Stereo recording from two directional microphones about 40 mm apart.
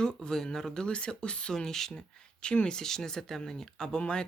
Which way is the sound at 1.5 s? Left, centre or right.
Centre.